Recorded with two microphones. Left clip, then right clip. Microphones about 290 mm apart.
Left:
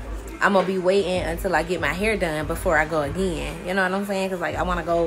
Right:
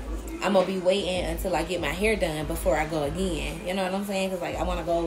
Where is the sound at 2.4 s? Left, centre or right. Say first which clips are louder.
Left 4 dB; left.